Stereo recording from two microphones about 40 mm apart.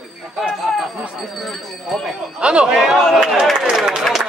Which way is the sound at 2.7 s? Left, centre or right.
Centre.